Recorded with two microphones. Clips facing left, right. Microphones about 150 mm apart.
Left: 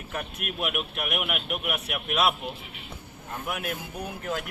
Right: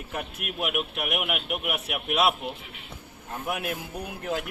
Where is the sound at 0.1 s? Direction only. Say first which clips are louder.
Left 1 dB; 10° right (ahead or behind).